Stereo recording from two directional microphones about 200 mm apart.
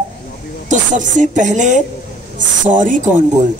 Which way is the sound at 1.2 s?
40° right (ahead or behind).